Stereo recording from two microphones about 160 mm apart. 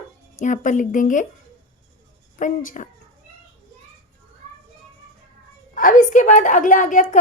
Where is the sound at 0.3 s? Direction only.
55° left (ahead or behind).